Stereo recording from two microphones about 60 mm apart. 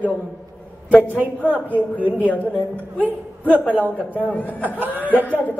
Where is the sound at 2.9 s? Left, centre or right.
Right.